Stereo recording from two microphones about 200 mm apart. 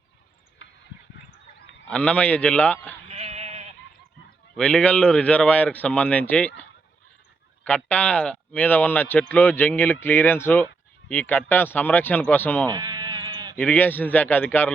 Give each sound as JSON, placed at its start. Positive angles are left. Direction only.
{"t": 1.9, "sound": "speech", "side_deg": 5}
{"t": 3.1, "sound": "sheep", "side_deg": -30}
{"t": 4.5, "sound": "speech", "side_deg": 5}
{"t": 12.6, "sound": "sheep", "side_deg": -20}
{"t": 13.6, "sound": "speech", "side_deg": 10}